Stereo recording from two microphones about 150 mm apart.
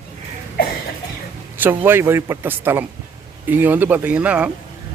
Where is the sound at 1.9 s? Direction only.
15° right (ahead or behind).